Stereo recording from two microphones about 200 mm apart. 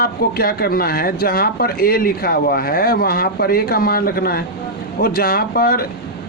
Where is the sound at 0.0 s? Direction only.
50° left (ahead or behind).